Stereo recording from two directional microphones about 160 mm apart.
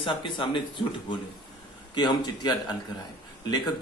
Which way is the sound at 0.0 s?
30° left (ahead or behind).